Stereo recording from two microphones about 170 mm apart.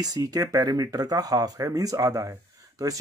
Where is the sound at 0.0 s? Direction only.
20° right (ahead or behind).